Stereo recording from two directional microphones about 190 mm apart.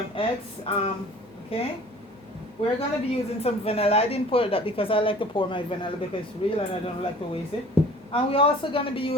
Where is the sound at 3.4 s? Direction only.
30° left (ahead or behind).